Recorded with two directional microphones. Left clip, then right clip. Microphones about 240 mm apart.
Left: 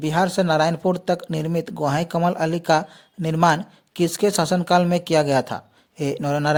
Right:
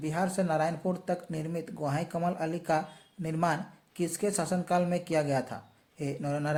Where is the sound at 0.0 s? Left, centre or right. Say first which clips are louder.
Left 11 dB; left.